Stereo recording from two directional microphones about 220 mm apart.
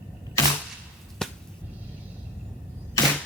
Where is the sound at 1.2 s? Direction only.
Centre (ahead or behind).